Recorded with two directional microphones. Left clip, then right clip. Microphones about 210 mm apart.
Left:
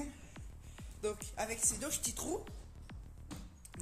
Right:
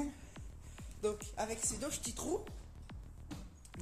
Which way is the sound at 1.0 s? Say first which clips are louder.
Right 1 dB; 5° right (ahead or behind).